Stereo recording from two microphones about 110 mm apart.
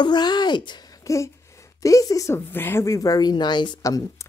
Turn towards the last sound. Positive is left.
turn(degrees=45)  # may be behind; listen again after turning